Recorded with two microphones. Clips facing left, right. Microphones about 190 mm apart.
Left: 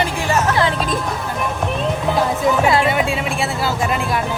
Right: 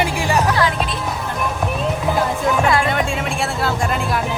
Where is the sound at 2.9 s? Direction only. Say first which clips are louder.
Left 1 dB; 5° left (ahead or behind).